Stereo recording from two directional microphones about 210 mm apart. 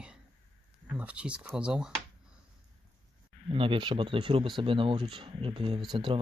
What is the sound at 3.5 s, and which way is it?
Speech, 25° right (ahead or behind).